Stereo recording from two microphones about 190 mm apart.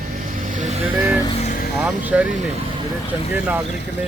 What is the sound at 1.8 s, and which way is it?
Speech, 5° right (ahead or behind).